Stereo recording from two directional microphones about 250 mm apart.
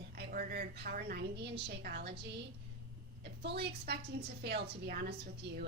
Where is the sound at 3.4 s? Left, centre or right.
Right.